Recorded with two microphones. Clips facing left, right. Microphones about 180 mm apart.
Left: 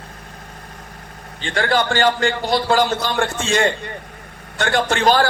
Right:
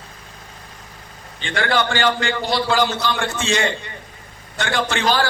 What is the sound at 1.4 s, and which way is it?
A man's voice, 40° left (ahead or behind).